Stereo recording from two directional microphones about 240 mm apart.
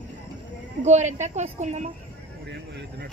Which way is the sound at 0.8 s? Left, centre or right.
Right.